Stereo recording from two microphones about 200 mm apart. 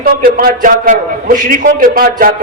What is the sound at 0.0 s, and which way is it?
A man's voice, 45° right (ahead or behind).